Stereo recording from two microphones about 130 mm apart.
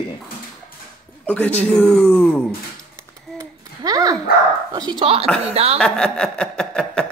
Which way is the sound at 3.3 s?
30° right (ahead or behind).